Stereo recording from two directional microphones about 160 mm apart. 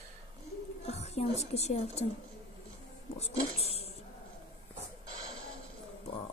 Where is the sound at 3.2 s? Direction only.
40° left (ahead or behind).